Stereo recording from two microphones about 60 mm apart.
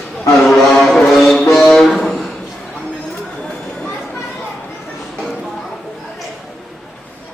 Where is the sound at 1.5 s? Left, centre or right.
Centre.